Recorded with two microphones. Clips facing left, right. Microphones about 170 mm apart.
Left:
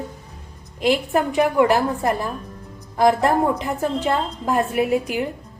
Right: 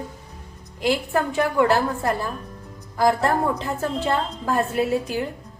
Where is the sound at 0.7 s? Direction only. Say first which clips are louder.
Left 3 dB; 20° left (ahead or behind).